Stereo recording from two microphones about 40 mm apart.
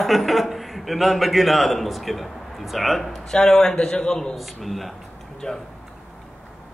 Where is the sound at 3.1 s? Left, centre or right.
Centre.